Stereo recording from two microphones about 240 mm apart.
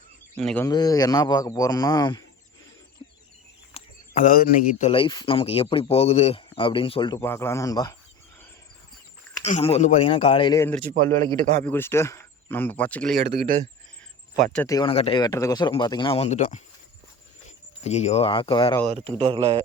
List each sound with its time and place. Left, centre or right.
0.3 s a man's voice: centre
3.8 s speech: left; by 7.9 s centre
9.4 s a man's voice: left; by 13.1 s centre
13.2 s speech: right
14.5 s speech: centre; by 16.6 s left
17.8 s speech: left
18.9 s speech: right